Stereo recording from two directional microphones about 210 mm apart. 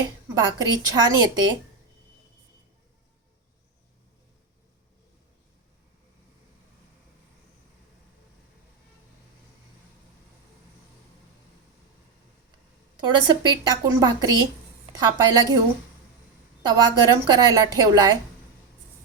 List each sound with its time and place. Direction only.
0.3 s a woman's voice: 20° right (ahead or behind)
13.2 s a woman's voice: 20° right (ahead or behind)
16.6 s a woman's voice: 20° right (ahead or behind)